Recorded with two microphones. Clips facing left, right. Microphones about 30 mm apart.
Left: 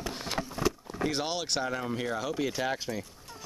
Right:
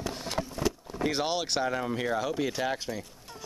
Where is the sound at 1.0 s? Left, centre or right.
Centre.